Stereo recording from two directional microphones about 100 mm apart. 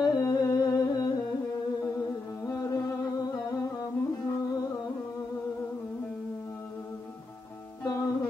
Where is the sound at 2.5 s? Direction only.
30° left (ahead or behind).